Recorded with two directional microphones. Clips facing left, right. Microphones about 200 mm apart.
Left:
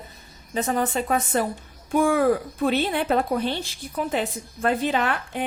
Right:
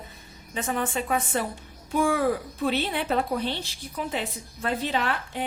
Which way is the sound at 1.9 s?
50° left (ahead or behind).